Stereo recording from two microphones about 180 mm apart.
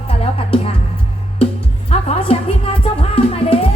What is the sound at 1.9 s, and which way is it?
Music, 30° left (ahead or behind).